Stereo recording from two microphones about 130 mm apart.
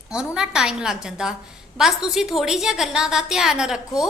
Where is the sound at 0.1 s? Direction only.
5° right (ahead or behind).